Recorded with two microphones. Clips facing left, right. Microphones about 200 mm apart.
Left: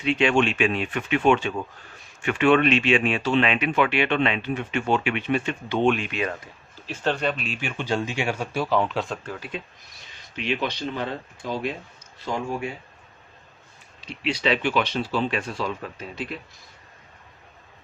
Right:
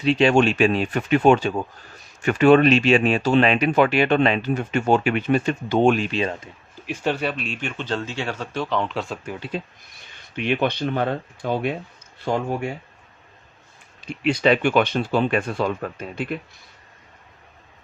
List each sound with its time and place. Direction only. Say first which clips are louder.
0.0 s speech: right 4 dB; 35° right (ahead or behind)
6.8 s speech: right 1 dB; 10° right (ahead or behind)
9.9 s speech: right 5 dB; 55° right (ahead or behind)
14.0 s speech: right 6 dB; 50° right (ahead or behind)